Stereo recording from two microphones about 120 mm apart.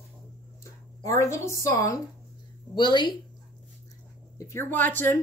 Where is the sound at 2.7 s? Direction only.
40° left (ahead or behind).